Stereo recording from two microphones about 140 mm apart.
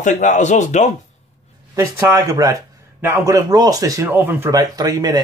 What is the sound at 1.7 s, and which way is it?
Speech, 15° right (ahead or behind).